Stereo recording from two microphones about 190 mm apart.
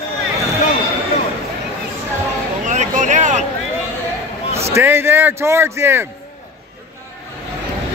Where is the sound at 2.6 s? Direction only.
40° right (ahead or behind).